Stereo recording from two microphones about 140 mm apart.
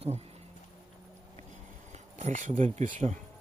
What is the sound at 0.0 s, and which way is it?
Speech, 50° right (ahead or behind).